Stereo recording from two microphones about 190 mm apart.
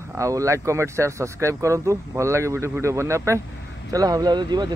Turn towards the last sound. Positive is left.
turn(degrees=-20)  # may be behind; listen again after turning